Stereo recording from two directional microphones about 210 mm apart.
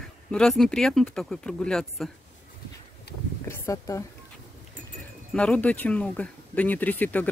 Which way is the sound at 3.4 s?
15° left (ahead or behind).